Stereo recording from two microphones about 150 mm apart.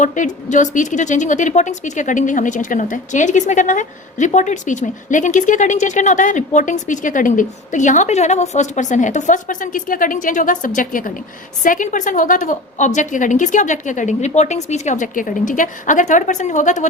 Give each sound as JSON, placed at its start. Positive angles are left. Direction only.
{"t": 0.0, "sound": "a woman's voice", "side_deg": 55}